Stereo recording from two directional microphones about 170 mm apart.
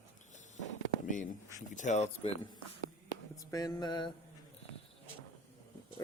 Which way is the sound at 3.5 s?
20° left (ahead or behind).